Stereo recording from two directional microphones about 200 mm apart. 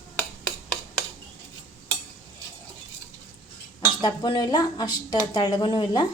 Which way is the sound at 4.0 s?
20° left (ahead or behind).